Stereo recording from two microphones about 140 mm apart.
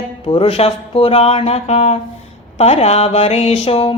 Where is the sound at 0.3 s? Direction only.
45° left (ahead or behind).